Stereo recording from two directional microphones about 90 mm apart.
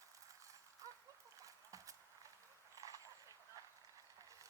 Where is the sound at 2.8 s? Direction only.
40° right (ahead or behind).